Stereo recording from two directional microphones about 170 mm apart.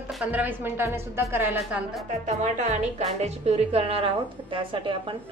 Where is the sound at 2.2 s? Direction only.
45° right (ahead or behind).